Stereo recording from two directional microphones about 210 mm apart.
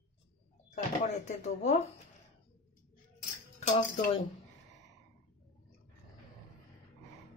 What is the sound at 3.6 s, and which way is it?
Cutlery, 30° left (ahead or behind).